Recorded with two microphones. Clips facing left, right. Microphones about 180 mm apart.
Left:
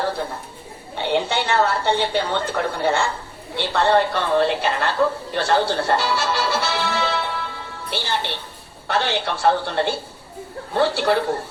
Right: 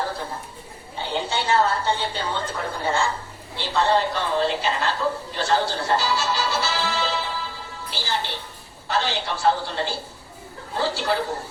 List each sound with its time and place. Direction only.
0.9 s a woman's voice: 70° left (ahead or behind)